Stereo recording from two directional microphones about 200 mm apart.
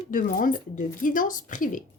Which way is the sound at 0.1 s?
45° left (ahead or behind).